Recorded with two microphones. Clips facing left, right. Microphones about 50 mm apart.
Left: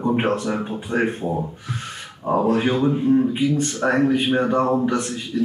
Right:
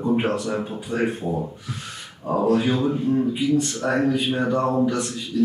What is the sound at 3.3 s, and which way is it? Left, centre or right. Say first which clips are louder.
A man's voice: left 1 dB; left.